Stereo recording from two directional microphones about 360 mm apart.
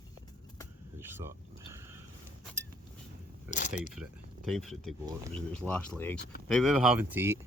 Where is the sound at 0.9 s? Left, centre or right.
Centre.